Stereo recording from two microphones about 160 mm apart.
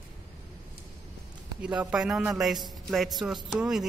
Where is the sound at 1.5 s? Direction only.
5° right (ahead or behind).